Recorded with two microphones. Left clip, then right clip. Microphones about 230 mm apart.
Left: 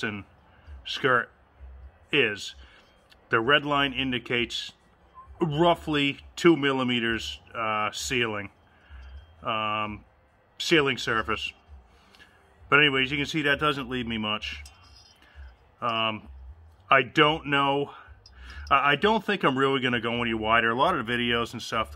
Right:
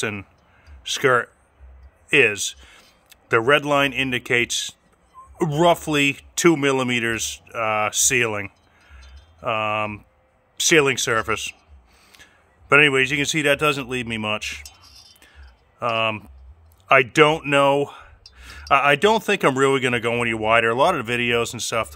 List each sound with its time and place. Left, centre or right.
0.0 s a man's voice: right
15.8 s speech: right